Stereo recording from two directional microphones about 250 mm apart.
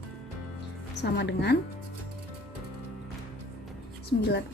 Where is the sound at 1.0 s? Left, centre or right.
Left.